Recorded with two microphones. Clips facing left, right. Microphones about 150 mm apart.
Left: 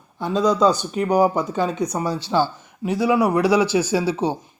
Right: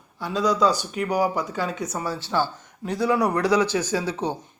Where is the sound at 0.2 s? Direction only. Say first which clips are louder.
Left 4 dB; 20° left (ahead or behind).